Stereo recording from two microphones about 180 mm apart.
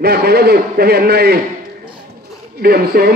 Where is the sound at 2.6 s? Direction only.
60° right (ahead or behind).